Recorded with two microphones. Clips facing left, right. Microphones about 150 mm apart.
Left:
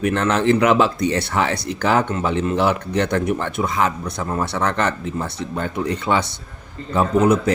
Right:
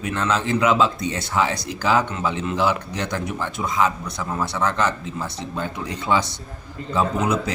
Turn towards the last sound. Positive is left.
turn(degrees=55)  # may be behind; listen again after turning